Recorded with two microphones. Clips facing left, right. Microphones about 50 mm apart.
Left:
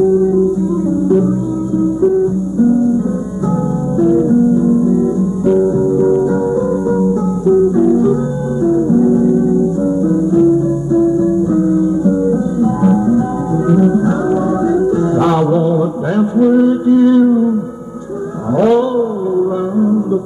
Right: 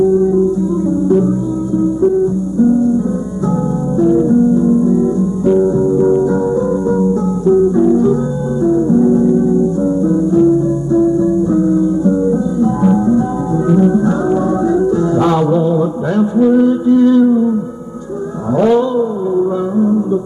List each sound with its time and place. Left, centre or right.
1.0 s music: left
4.0 s music: left
18.6 s a sound: centre